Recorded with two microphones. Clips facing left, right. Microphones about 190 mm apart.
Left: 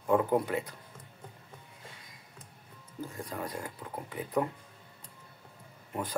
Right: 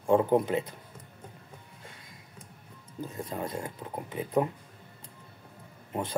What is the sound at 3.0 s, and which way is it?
Speech, 20° right (ahead or behind).